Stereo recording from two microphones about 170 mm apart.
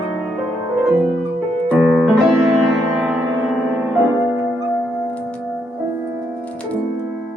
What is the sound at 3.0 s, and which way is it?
Music, 5° right (ahead or behind).